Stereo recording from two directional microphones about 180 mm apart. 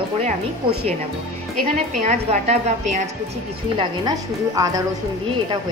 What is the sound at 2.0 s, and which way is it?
A woman's voice, 40° right (ahead or behind).